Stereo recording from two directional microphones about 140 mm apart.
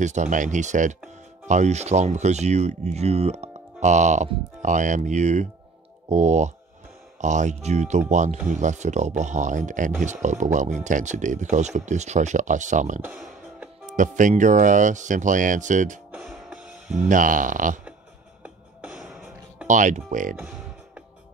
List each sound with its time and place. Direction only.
0.0 s speech: 60° right (ahead or behind)
13.0 s music: 10° right (ahead or behind)
13.9 s speech: 65° right (ahead or behind)
16.3 s music: 10° right (ahead or behind)
16.9 s speech: 65° right (ahead or behind)
18.4 s music: 10° right (ahead or behind)
19.7 s speech: 65° right (ahead or behind)
20.3 s music: 10° right (ahead or behind)